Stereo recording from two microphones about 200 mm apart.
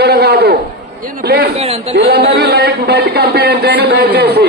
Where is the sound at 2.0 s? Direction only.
55° right (ahead or behind).